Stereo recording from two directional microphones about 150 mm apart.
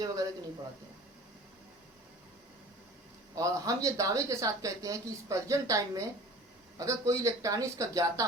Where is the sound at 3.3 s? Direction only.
20° right (ahead or behind).